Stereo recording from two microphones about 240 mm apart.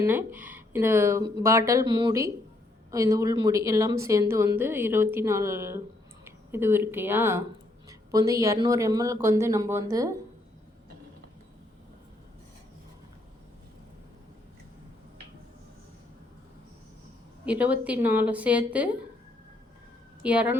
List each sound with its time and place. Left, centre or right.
0.0 s speech: centre
17.4 s a woman's voice: centre
20.2 s a woman's voice: centre